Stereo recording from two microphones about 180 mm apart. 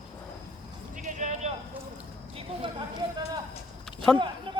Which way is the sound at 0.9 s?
45° right (ahead or behind).